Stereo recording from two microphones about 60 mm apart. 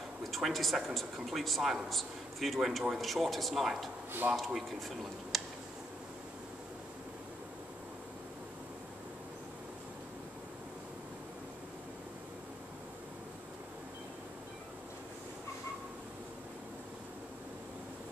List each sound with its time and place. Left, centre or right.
0.2 s speech: centre
4.2 s speech: right
4.6 s speech: centre